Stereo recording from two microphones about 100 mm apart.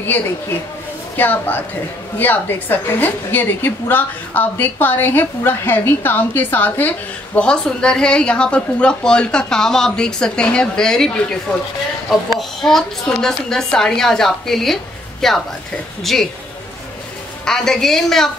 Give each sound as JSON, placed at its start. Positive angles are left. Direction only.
{"t": 1.1, "sound": "a woman's voice", "side_deg": 20}
{"t": 12.4, "sound": "a woman's voice", "side_deg": 5}
{"t": 17.5, "sound": "a woman's voice", "side_deg": 5}